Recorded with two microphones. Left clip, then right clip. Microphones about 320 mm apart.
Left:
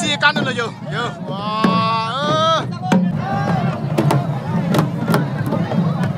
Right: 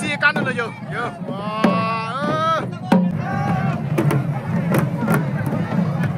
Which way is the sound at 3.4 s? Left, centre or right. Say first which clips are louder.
Left 2 dB; left.